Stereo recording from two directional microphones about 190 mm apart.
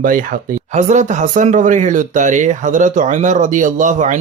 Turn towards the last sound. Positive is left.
turn(degrees=-40)  # may be behind; listen again after turning